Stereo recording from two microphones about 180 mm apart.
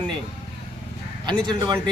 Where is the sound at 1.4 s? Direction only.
20° right (ahead or behind).